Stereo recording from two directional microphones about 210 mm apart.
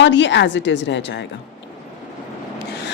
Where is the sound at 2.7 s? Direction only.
50° left (ahead or behind).